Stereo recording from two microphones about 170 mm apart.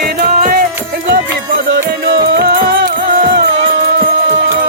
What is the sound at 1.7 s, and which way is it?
Music, 55° right (ahead or behind).